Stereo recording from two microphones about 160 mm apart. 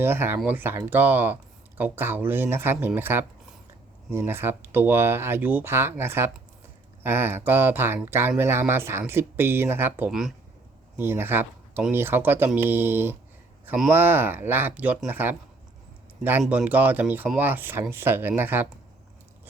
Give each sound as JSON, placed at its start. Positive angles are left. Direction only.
{"t": 0.0, "sound": "speech", "side_deg": -15}
{"t": 10.1, "sound": "speech", "side_deg": 0}
{"t": 10.9, "sound": "speech", "side_deg": -15}
{"t": 16.4, "sound": "speech", "side_deg": -10}